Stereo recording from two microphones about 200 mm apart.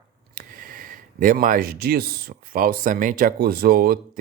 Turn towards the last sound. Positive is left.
turn(degrees=-50)  # may be behind; listen again after turning